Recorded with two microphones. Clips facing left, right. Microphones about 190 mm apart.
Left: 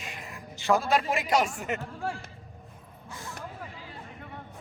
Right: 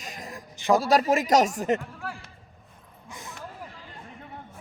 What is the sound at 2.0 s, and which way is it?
Speech, 25° left (ahead or behind).